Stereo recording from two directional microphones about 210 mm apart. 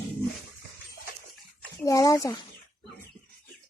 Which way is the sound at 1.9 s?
15° left (ahead or behind).